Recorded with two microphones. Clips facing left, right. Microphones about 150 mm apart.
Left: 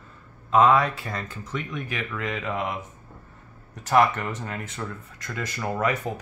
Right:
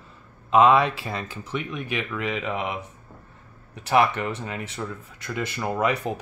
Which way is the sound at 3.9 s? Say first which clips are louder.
Even; 15° right (ahead or behind).